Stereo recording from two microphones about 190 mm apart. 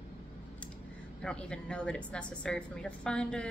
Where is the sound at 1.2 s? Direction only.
5° left (ahead or behind).